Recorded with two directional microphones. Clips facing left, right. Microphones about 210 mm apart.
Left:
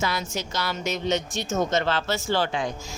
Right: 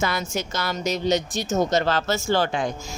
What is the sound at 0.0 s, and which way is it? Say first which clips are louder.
Speech: right 3 dB; 50° right (ahead or behind).